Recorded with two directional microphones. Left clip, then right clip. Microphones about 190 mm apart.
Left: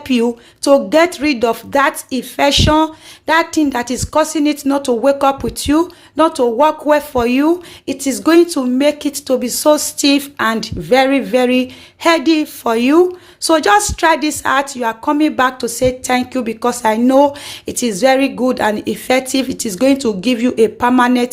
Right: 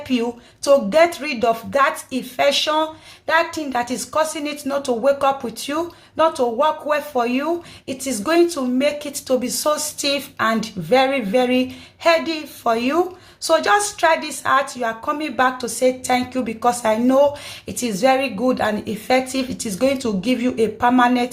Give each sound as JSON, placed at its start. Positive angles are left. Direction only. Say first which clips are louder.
{"t": 0.1, "sound": "speech", "louder": "left 7 dB", "side_deg": 40}